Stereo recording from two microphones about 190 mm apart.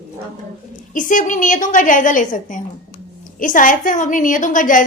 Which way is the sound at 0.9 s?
45° left (ahead or behind).